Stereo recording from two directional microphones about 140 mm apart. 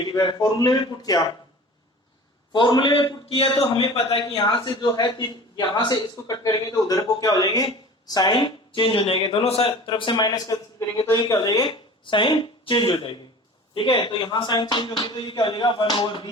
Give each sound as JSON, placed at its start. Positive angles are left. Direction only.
{"t": 0.0, "sound": "a man's voice", "side_deg": 30}
{"t": 2.5, "sound": "a man's voice", "side_deg": 35}